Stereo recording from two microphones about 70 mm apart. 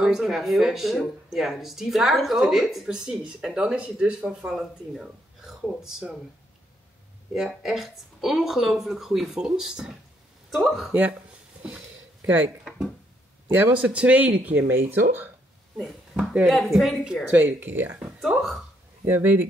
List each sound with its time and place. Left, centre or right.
0.0 s speech: centre
7.3 s speech: centre
10.9 s speech: right
13.5 s a man's voice: right
13.7 s speech: centre
15.8 s speech: centre
17.3 s speech: right
19.0 s speech: right